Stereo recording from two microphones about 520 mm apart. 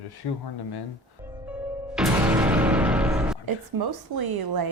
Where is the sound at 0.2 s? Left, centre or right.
Left.